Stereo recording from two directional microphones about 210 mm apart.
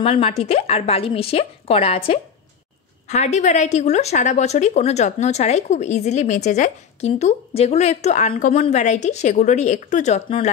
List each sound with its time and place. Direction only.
0.0 s a woman's voice: 30° left (ahead or behind)